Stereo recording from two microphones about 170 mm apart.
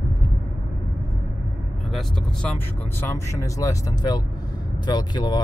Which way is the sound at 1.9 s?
5° left (ahead or behind).